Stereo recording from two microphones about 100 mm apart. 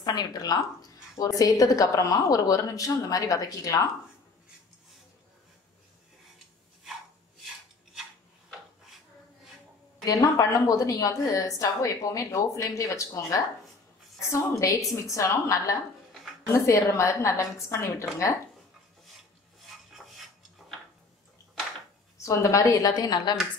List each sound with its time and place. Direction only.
0.0 s a woman's voice: 45° left (ahead or behind)
10.0 s a woman's voice: 35° left (ahead or behind)
20.0 s dishes: 5° right (ahead or behind)
22.2 s a woman's voice: 30° left (ahead or behind)